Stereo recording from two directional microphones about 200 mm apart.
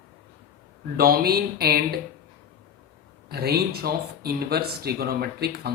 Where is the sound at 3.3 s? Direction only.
50° right (ahead or behind).